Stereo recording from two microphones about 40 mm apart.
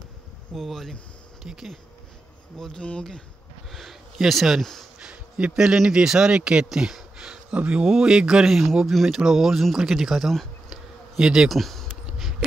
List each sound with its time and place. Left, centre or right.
0.6 s speech: centre
1.4 s speech: centre
3.7 s speech: centre
5.0 s a sound: right
5.5 s speech: centre
6.7 s speech: centre
7.5 s speech: right
7.8 s speech: centre
8.8 s speech: centre
10.7 s a sound: centre
11.4 s speech: centre